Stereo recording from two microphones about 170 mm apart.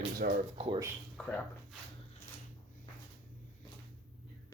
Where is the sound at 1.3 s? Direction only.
5° left (ahead or behind).